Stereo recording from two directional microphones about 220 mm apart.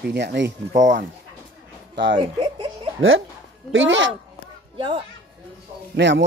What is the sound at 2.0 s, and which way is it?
A child's voice, 55° right (ahead or behind).